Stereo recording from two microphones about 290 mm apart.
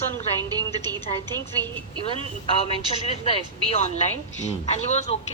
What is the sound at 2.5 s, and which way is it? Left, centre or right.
A woman's voice, centre.